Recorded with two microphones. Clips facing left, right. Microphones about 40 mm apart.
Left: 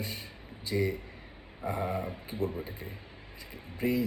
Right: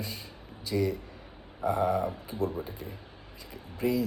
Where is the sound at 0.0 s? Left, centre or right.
Left.